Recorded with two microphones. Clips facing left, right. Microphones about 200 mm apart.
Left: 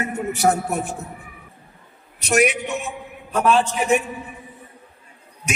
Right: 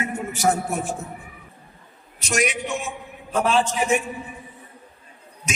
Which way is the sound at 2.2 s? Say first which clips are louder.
Left 5 dB; 60° left (ahead or behind).